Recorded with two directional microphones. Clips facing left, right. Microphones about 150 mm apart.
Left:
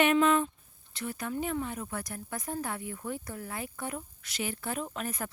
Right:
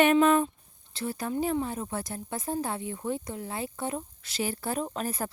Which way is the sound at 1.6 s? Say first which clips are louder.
Right 4 dB; 30° right (ahead or behind).